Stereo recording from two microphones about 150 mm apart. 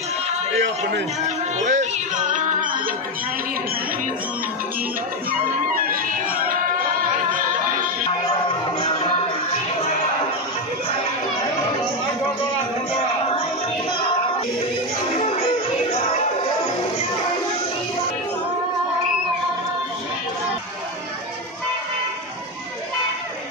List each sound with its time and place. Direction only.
1.6 s music: 55° right (ahead or behind)
5.8 s music: 70° right (ahead or behind)